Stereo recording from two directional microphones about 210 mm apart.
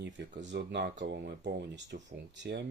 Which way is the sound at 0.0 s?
55° right (ahead or behind).